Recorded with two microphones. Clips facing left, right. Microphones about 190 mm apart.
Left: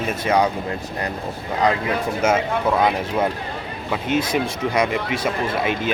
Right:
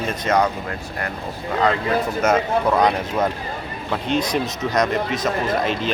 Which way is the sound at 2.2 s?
10° left (ahead or behind).